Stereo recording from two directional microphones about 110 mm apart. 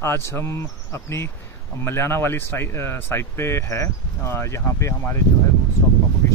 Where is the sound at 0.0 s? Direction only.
25° left (ahead or behind).